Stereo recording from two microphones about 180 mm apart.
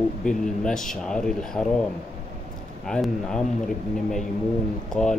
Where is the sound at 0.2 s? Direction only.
5° left (ahead or behind).